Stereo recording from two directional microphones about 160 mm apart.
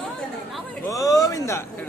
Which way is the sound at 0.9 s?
20° left (ahead or behind).